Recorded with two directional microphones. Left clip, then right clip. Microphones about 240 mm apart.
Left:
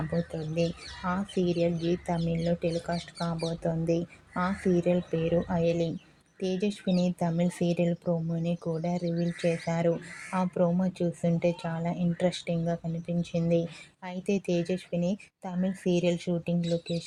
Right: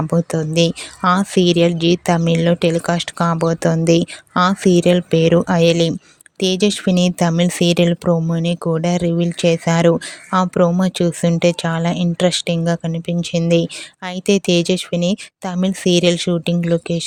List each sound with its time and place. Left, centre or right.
0.1 s speech: right